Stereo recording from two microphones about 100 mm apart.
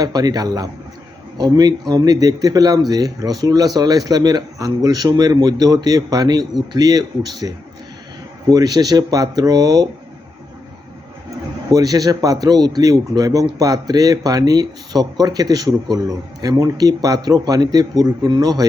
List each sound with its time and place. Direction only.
0.0 s a man's voice: 40° right (ahead or behind)
11.7 s a man's voice: 35° right (ahead or behind)